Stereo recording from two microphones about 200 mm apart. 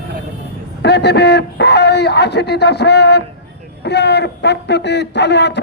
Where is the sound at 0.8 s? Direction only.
55° left (ahead or behind).